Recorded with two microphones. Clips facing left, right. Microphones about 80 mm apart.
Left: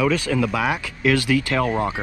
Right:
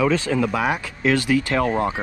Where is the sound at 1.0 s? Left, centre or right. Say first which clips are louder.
Even; left.